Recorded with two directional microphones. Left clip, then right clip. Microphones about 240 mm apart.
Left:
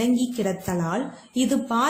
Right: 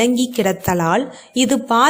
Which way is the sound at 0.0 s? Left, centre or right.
Right.